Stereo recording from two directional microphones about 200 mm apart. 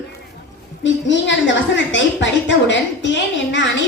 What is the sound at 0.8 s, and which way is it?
A woman's voice, 65° left (ahead or behind).